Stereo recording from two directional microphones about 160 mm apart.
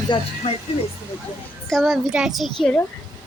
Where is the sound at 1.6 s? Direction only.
Centre (ahead or behind).